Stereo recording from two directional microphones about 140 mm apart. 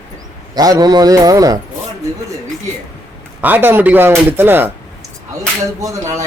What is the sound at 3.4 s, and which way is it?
Speech, 10° right (ahead or behind).